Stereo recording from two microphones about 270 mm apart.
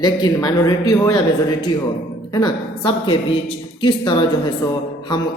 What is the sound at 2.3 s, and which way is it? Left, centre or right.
A woman's voice, centre.